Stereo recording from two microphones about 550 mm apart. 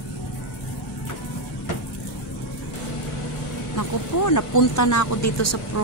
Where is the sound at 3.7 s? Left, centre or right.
Left.